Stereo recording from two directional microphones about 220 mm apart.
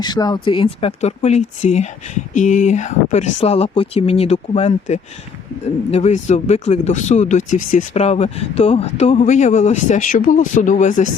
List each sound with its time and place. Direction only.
0.0 s speech: 20° left (ahead or behind); by 11.1 s 35° left (ahead or behind)